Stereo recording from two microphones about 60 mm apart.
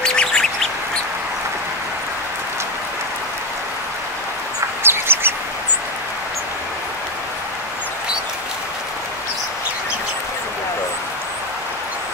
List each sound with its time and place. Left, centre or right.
0.0 s bird: centre
4.8 s bird: right